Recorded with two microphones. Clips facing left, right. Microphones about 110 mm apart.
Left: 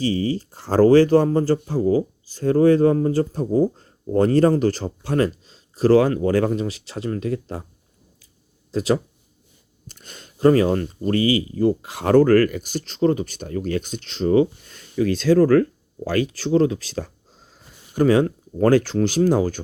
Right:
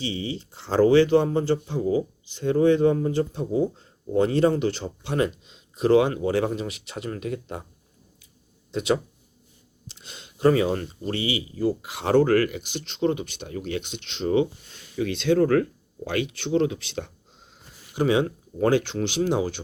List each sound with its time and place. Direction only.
0.0 s speech: 40° left (ahead or behind)
8.7 s speech: 35° left (ahead or behind)
9.8 s a sound: 50° left (ahead or behind)
10.5 s speech: 45° left (ahead or behind)